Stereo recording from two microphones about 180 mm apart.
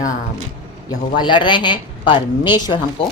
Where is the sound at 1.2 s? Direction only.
25° left (ahead or behind).